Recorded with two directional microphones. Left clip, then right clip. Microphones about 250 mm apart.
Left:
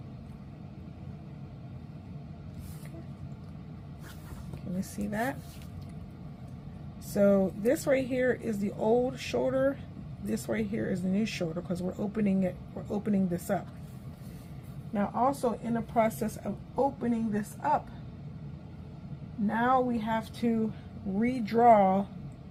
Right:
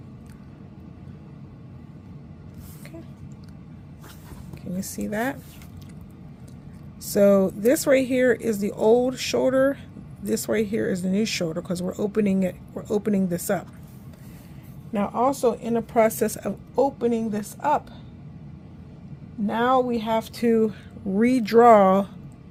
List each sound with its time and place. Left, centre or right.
4.8 s speech: right
7.1 s speech: right
14.9 s speech: right
19.5 s speech: right